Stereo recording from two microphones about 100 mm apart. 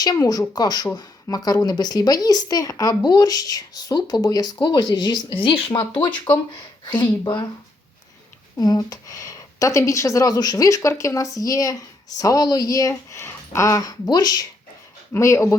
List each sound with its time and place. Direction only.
0.0 s speech: 40° left (ahead or behind)
8.5 s speech: 40° left (ahead or behind)
15.1 s speech: 30° left (ahead or behind)